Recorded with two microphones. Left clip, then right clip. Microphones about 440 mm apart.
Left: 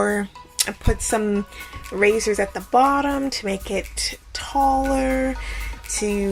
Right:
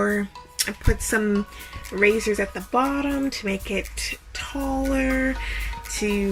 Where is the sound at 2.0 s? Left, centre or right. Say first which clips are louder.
Left 2 dB; left.